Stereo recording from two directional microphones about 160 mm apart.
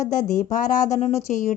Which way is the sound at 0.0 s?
50° left (ahead or behind).